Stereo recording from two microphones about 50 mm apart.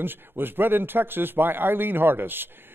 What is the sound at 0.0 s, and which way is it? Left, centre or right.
A man's voice, right.